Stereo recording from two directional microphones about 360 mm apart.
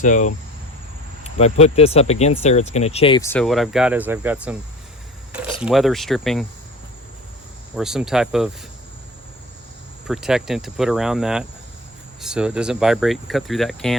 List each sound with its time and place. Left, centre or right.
0.0 s speech: left; by 4.5 s centre
5.6 s speech: centre
7.8 s speech: centre
10.1 s speech: centre